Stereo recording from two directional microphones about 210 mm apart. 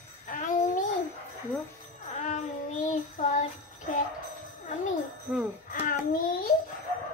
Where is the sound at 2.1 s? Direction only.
35° left (ahead or behind).